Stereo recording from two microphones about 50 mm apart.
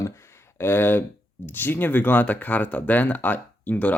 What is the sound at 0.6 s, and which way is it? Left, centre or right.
Speech, left.